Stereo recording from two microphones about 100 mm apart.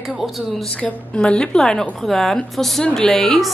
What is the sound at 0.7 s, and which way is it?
A woman's voice, 10° left (ahead or behind).